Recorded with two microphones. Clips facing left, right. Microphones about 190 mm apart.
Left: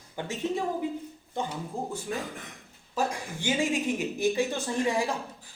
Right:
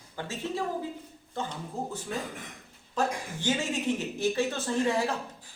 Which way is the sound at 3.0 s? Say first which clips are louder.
Even; 10° left (ahead or behind).